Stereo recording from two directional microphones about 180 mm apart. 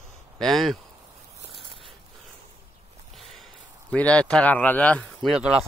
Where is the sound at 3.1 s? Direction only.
Centre (ahead or behind).